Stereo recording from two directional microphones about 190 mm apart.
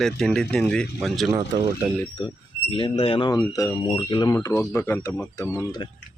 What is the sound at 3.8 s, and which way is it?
Speech, 30° left (ahead or behind).